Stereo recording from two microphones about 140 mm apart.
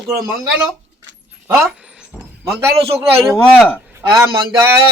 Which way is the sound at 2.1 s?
5° right (ahead or behind).